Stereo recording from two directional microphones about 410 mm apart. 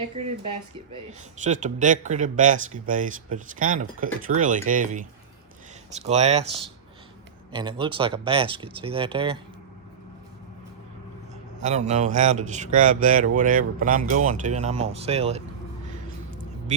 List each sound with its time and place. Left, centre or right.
0.2 s speech: centre
1.5 s speech: centre
7.5 s speech: centre
11.6 s speech: centre